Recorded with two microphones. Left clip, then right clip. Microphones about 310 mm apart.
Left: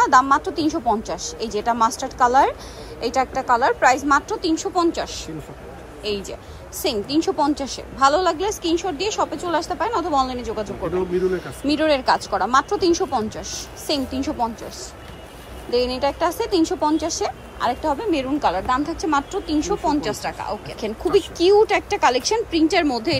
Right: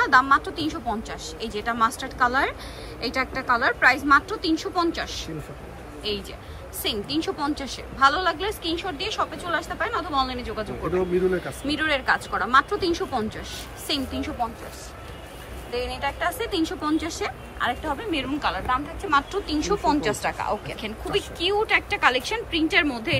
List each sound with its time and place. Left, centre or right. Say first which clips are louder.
0.0 s speech: left 3 dB; centre
6.8 s speech: left 5 dB; centre
15.7 s a woman's voice: left 8 dB; left
16.0 s speech: left 5 dB; centre